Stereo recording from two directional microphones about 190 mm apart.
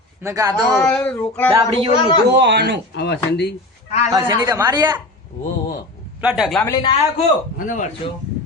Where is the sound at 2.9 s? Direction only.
65° left (ahead or behind).